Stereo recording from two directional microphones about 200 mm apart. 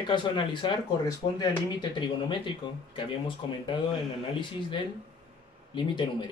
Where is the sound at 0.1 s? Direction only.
25° left (ahead or behind).